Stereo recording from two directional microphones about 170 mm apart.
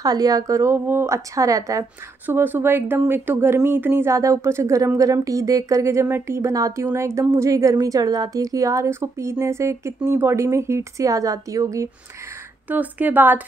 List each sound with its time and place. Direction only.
0.0 s a woman's voice: 20° right (ahead or behind)